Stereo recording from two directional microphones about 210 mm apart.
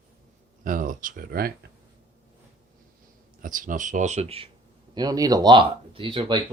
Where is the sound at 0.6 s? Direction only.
40° right (ahead or behind).